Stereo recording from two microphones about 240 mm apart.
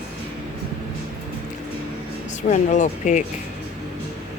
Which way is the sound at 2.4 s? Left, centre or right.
Left.